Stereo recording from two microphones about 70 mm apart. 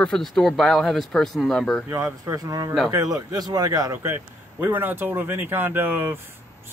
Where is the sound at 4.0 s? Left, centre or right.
Right.